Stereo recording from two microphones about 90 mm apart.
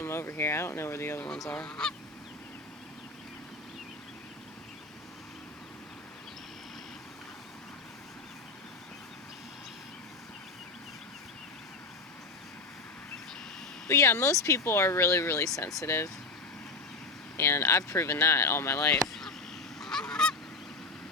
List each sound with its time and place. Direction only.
0.0 s speech: 30° left (ahead or behind)
1.5 s goose: 10° left (ahead or behind)
13.8 s speech: 30° left (ahead or behind)
17.3 s speech: 30° left (ahead or behind)
18.9 s a sound: 5° left (ahead or behind)
19.8 s goose: 5° left (ahead or behind)